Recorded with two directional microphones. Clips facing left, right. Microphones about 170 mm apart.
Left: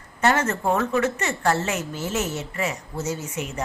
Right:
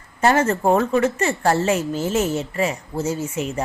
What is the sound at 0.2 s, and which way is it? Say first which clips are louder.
A woman's voice: right 4 dB; 30° right (ahead or behind).